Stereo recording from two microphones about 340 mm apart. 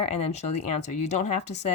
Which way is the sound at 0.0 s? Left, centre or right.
Centre.